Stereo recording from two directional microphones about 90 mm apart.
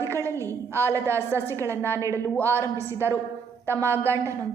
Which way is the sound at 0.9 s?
30° right (ahead or behind).